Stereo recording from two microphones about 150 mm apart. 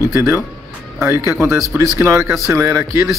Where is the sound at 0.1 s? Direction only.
15° right (ahead or behind).